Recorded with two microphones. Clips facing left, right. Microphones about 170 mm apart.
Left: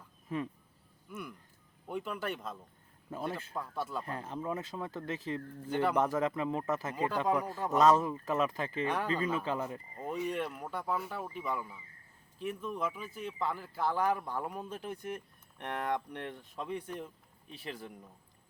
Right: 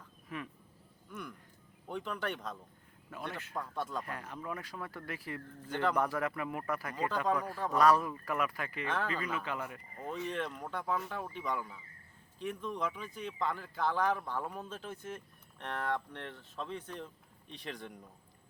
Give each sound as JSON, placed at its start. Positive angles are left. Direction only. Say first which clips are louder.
{"t": 1.1, "sound": "speech", "louder": "left 1 dB", "side_deg": 5}
{"t": 3.1, "sound": "speech", "louder": "left 5 dB", "side_deg": 30}
{"t": 3.5, "sound": "speech", "louder": "left 1 dB", "side_deg": 5}
{"t": 4.0, "sound": "speech", "louder": "left 4 dB", "side_deg": 30}
{"t": 5.7, "sound": "speech", "louder": "left 2 dB", "side_deg": 10}
{"t": 6.0, "sound": "speech", "louder": "left 3 dB", "side_deg": 20}
{"t": 10.0, "sound": "speech", "louder": "left 2 dB", "side_deg": 10}